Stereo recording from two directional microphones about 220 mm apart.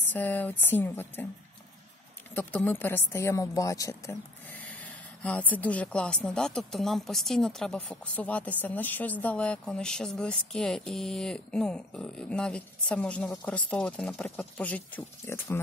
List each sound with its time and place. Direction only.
0.1 s speech: 10° left (ahead or behind)
2.3 s a woman's voice: 10° left (ahead or behind)